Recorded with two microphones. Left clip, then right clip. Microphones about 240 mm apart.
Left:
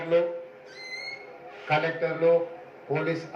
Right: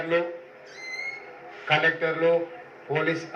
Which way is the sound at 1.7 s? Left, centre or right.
Centre.